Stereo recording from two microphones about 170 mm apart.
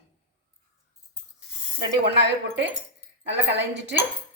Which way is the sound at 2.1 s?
90° right.